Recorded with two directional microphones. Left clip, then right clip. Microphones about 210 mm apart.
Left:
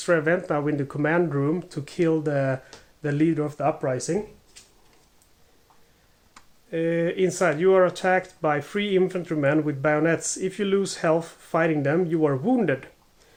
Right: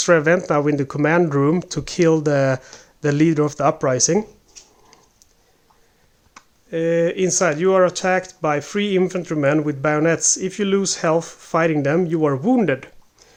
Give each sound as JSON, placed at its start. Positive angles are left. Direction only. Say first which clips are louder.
{"t": 0.0, "sound": "speech", "louder": "right 7 dB", "side_deg": -35}
{"t": 6.7, "sound": "speech", "louder": "right 6 dB", "side_deg": -30}